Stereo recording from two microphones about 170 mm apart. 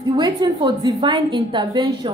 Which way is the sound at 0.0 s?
25° right (ahead or behind).